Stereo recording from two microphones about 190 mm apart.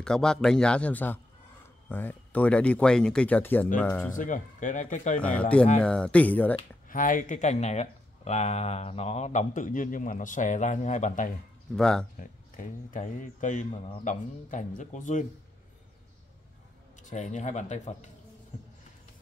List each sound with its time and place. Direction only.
0.0 s a man's voice: 5° left (ahead or behind)
4.1 s speech: 45° left (ahead or behind)
5.2 s speech: 5° left (ahead or behind)
6.9 s speech: 45° left (ahead or behind)
11.7 s a man's voice: 5° left (ahead or behind)
12.2 s speech: 45° left (ahead or behind)
17.0 s speech: 40° left (ahead or behind)